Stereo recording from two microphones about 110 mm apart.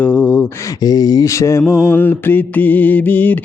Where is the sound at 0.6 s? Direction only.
35° left (ahead or behind).